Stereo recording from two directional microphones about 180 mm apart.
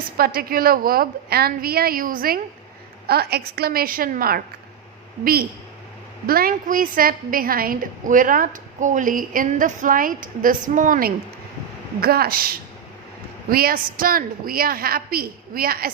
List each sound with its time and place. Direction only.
0.2 s a woman's voice: 55° right (ahead or behind)
11.9 s a woman's voice: 60° right (ahead or behind)